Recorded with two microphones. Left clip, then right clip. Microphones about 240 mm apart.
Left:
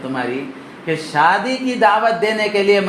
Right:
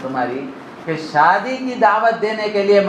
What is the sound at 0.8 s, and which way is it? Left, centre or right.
Speech, left.